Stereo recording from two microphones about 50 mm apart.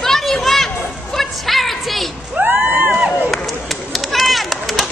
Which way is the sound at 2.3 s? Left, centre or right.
Right.